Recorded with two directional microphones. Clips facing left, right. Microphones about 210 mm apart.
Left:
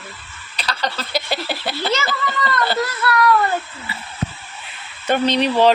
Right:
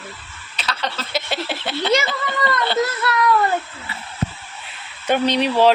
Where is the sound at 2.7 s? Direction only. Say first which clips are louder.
Even; 25° right (ahead or behind).